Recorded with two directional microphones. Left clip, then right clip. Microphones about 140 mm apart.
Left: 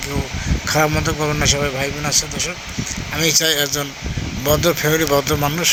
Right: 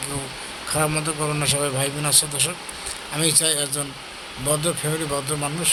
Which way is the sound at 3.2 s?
20° left (ahead or behind).